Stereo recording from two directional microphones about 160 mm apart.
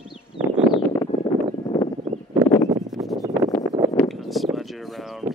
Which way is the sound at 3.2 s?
20° right (ahead or behind).